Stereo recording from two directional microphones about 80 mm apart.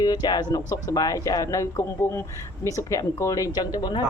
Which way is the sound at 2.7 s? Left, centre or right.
Left.